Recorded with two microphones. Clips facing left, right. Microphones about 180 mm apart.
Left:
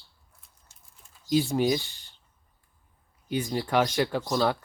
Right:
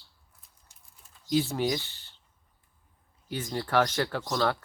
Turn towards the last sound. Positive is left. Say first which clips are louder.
# left 3 dB
turn(degrees=15)  # may be behind; listen again after turning